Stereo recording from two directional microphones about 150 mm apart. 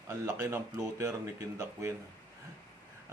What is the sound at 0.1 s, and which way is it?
Speech, 20° right (ahead or behind).